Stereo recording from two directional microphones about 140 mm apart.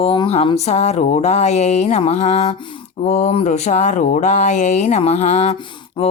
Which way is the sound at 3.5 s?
55° left (ahead or behind).